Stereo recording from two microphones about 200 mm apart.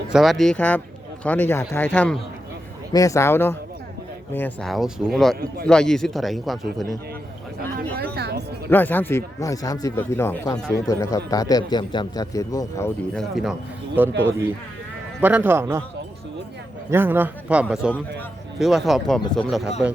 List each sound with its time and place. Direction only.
0.1 s a man's voice: centre (ahead or behind)
7.9 s a sound: 50° right (ahead or behind)
8.7 s a man's voice: 10° left (ahead or behind)
13.1 s speech: centre (ahead or behind)
16.9 s speech: 10° right (ahead or behind)